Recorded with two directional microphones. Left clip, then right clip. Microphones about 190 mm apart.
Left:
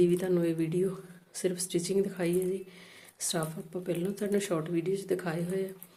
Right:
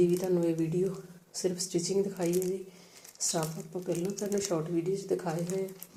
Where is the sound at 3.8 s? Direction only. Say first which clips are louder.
Left 1 dB; 20° left (ahead or behind).